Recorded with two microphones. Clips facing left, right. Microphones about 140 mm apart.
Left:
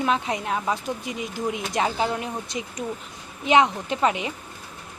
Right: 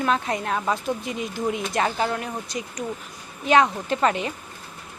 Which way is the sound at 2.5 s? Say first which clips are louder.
Even; 25° left (ahead or behind).